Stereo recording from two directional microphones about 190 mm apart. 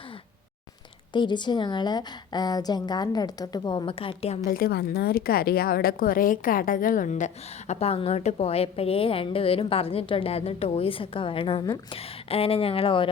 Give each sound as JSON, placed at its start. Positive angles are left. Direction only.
{"t": 1.1, "sound": "a woman's voice", "side_deg": 25}
{"t": 4.4, "sound": "a woman's voice", "side_deg": 50}
{"t": 7.7, "sound": "a woman's voice", "side_deg": 30}